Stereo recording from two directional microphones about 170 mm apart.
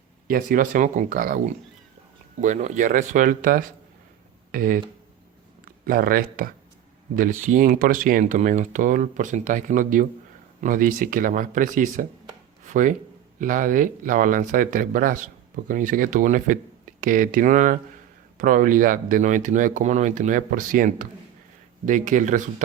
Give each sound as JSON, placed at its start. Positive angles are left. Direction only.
{"t": 0.3, "sound": "speech", "side_deg": -55}
{"t": 2.4, "sound": "speech", "side_deg": -45}
{"t": 7.2, "sound": "speech", "side_deg": -50}